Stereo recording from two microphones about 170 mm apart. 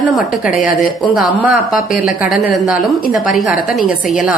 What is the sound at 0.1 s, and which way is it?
A woman's voice, 5° right (ahead or behind).